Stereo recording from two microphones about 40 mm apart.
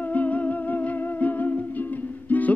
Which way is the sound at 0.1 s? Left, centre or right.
Left.